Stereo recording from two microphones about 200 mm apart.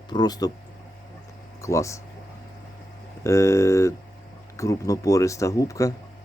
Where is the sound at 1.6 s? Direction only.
15° left (ahead or behind).